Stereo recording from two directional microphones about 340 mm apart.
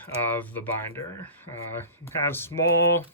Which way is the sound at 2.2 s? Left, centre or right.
Centre.